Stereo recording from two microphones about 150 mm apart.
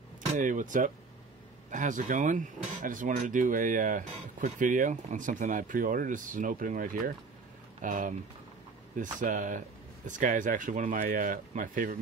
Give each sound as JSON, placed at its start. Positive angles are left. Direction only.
{"t": 0.4, "sound": "speech", "side_deg": -60}